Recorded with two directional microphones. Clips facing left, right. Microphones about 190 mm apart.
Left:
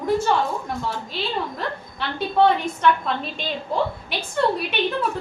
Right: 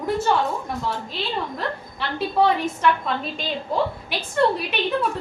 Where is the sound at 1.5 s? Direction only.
Centre (ahead or behind).